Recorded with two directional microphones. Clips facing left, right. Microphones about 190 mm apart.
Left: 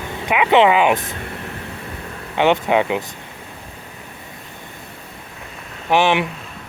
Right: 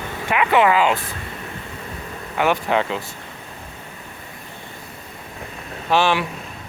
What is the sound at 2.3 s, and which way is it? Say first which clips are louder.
Speech: left 4 dB; 20° left (ahead or behind).